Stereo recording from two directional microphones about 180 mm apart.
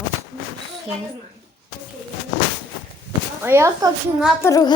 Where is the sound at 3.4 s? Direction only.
15° right (ahead or behind).